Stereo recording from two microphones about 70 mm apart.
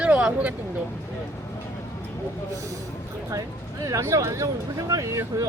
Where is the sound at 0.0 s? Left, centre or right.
Centre.